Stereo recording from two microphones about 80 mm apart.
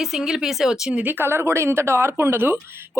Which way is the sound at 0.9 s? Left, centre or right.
Right.